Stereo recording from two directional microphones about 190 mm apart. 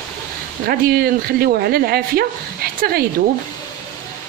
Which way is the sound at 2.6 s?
55° right (ahead or behind).